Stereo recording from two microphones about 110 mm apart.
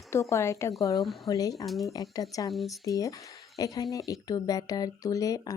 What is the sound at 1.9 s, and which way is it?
Speech, 35° left (ahead or behind).